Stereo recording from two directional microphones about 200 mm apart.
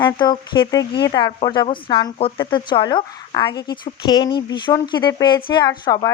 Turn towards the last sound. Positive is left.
turn(degrees=20)  # may be behind; listen again after turning